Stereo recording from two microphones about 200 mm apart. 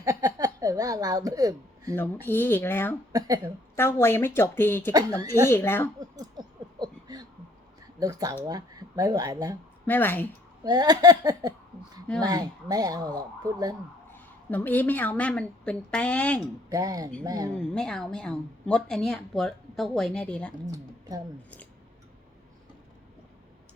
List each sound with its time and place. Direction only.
0.0 s speech: 15° right (ahead or behind)
2.0 s a woman's voice: 10° left (ahead or behind)
3.1 s speech: 20° right (ahead or behind)
3.8 s a woman's voice: 10° left (ahead or behind)
6.0 s a sound: 20° right (ahead or behind)
7.9 s speech: 15° right (ahead or behind)
9.8 s speech: 10° left (ahead or behind)
10.6 s speech: 20° right (ahead or behind)
14.5 s a woman's voice: 10° left (ahead or behind)
16.6 s speech: 15° right (ahead or behind)
17.6 s a woman's voice: 5° left (ahead or behind)
20.7 s speech: 20° right (ahead or behind)